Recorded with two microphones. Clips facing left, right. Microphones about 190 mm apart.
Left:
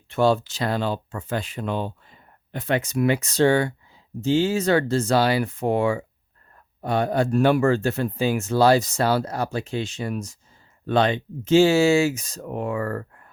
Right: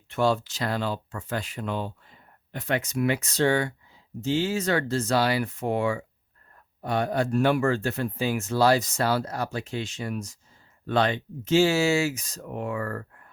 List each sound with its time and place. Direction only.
0.1 s speech: 30° left (ahead or behind)